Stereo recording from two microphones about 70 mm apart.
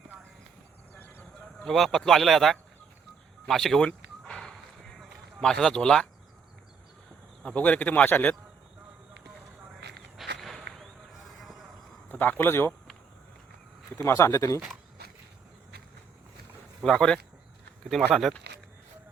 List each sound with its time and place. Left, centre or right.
0.9 s clip-clop: left
1.4 s speech: centre
4.2 s a sound: centre
7.4 s speech: centre
10.2 s walk: centre
11.1 s a sound: centre
12.0 s speech: left
13.9 s speech: left
16.8 s speech: centre